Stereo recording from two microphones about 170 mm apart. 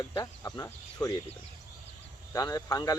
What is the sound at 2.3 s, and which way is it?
Speech, 20° left (ahead or behind).